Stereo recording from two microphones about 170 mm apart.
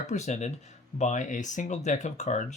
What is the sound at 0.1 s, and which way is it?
Speech, 45° left (ahead or behind).